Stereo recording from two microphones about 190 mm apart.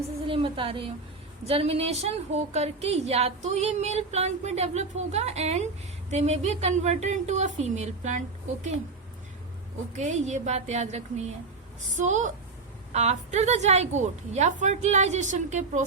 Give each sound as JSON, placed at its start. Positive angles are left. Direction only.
{"t": 0.3, "sound": "a woman's voice", "side_deg": -25}
{"t": 10.0, "sound": "a woman's voice", "side_deg": -40}